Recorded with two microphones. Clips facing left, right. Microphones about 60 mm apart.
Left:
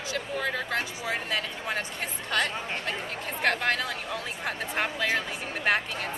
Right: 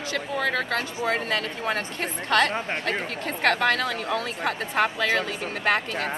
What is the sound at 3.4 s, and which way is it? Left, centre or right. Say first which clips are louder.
A woman's voice: right 4 dB; right.